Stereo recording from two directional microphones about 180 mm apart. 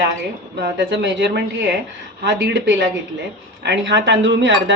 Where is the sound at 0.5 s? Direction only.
70° right (ahead or behind).